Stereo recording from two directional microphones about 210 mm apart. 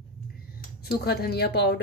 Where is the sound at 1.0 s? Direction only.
50° left (ahead or behind).